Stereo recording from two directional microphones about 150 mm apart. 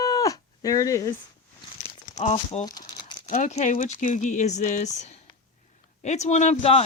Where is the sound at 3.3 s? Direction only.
50° left (ahead or behind).